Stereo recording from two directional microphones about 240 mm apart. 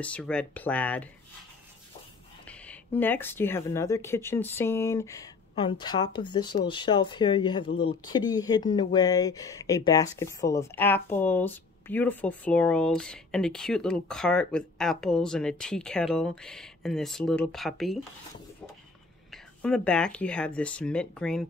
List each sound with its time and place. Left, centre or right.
0.0 s speech: centre
2.4 s speech: centre
19.3 s speech: centre